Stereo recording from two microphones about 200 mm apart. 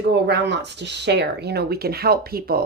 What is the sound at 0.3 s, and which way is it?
A woman's voice, 60° right (ahead or behind).